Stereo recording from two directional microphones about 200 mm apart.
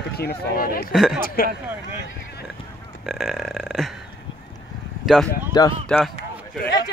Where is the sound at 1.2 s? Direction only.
45° left (ahead or behind).